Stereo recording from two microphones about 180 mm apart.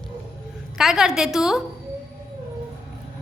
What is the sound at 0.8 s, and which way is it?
Speech, 5° right (ahead or behind).